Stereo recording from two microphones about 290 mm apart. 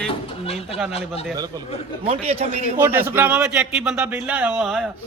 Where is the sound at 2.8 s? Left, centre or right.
Centre.